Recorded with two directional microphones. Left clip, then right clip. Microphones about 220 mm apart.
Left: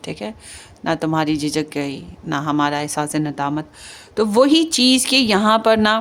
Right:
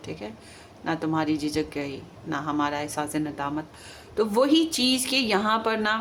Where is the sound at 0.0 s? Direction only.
50° left (ahead or behind).